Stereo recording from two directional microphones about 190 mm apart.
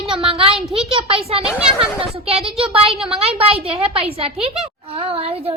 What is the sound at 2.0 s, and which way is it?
A woman's voice, 30° right (ahead or behind).